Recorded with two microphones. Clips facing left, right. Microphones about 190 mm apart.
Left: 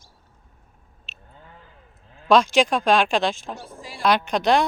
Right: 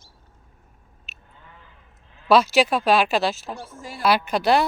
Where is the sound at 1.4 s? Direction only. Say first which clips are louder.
Left 3 dB; 40° left (ahead or behind).